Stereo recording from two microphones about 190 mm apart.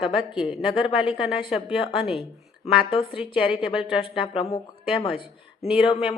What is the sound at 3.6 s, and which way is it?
Speech, 5° right (ahead or behind).